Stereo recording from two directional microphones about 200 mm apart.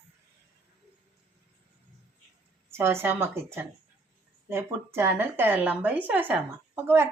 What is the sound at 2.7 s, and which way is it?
A woman's voice, 10° right (ahead or behind).